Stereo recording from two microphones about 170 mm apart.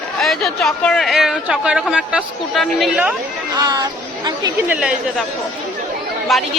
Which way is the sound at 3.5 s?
20° right (ahead or behind).